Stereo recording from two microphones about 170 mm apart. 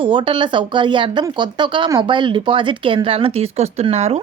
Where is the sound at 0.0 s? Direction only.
30° right (ahead or behind).